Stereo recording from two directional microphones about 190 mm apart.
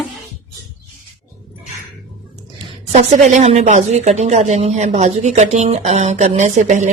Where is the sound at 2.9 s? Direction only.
35° right (ahead or behind).